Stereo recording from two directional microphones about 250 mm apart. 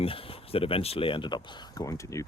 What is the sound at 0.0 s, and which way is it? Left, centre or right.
Speech, left.